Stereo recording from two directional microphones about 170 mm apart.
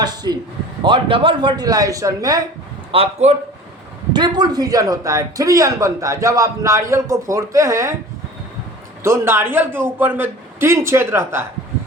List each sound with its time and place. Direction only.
0.0 s a man's voice: 25° right (ahead or behind)
2.9 s a man's voice: 35° right (ahead or behind)
4.1 s a man's voice: 25° right (ahead or behind)
9.0 s a man's voice: 15° right (ahead or behind)